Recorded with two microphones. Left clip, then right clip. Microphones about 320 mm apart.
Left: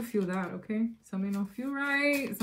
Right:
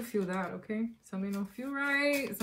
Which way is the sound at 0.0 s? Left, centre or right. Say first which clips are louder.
Left 1 dB; centre.